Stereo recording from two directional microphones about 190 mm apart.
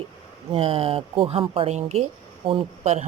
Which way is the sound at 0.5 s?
30° right (ahead or behind).